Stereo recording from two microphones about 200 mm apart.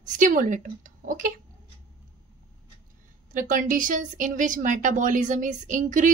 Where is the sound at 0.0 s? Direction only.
40° right (ahead or behind).